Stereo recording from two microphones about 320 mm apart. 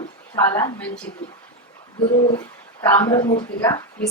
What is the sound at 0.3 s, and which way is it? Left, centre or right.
Speech, centre.